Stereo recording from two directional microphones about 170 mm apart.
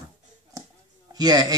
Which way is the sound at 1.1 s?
25° right (ahead or behind).